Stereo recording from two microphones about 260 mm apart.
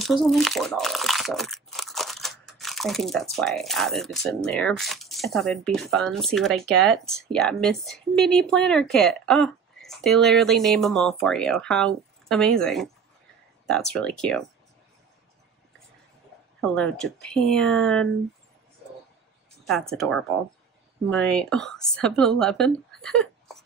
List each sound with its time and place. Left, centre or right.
0.0 s speech: centre
16.6 s speech: centre
19.7 s speech: centre